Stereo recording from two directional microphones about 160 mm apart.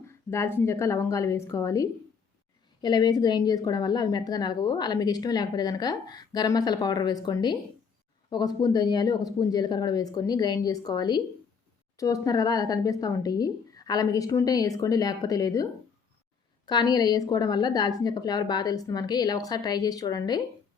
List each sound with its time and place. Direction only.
0.1 s a woman's voice: 15° left (ahead or behind)
16.6 s a woman's voice: 25° left (ahead or behind)